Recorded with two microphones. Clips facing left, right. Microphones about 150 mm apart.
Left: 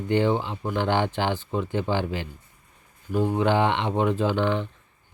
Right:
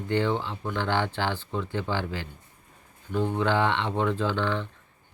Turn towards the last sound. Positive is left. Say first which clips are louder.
# left 4 dB
turn(degrees=15)  # may be behind; listen again after turning